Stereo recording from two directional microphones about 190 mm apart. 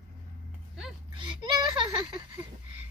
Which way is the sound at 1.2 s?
25° right (ahead or behind).